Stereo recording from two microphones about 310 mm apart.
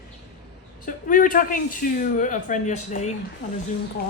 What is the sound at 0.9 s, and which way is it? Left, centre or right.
A woman's voice, left.